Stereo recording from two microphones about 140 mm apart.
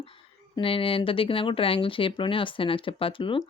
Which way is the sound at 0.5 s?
40° left (ahead or behind).